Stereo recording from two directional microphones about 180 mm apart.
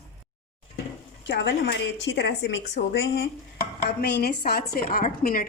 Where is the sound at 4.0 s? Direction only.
65° left (ahead or behind).